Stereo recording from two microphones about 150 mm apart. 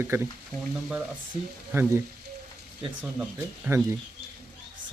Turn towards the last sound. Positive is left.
turn(degrees=-10)  # may be behind; listen again after turning